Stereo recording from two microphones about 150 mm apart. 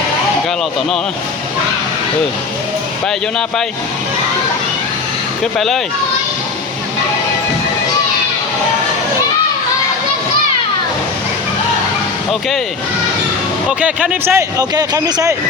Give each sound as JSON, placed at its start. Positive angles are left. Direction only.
{"t": 5.4, "sound": "speech", "side_deg": 0}
{"t": 13.7, "sound": "speech", "side_deg": -10}
{"t": 14.6, "sound": "speech", "side_deg": -25}